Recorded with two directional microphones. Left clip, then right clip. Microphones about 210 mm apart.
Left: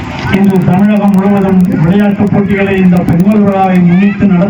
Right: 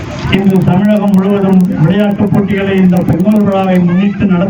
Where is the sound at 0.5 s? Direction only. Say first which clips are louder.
Left 1 dB; centre (ahead or behind).